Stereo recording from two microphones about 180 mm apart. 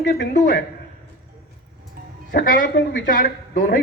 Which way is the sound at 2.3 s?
50° left (ahead or behind).